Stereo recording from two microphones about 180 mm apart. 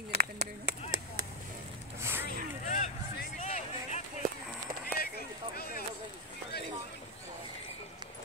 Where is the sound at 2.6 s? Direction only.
45° left (ahead or behind).